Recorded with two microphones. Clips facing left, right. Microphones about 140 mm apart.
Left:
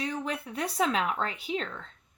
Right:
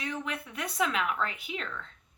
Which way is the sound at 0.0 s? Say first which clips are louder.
Left 3 dB; 35° left (ahead or behind).